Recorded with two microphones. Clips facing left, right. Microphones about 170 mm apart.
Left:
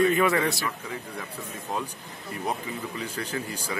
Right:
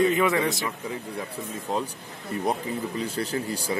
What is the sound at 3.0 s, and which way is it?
Speech, 35° right (ahead or behind).